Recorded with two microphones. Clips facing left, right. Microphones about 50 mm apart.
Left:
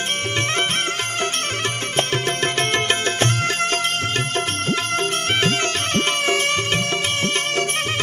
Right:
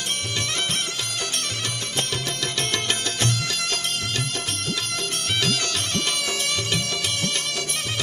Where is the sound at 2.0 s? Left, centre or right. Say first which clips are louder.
Left 7 dB; left.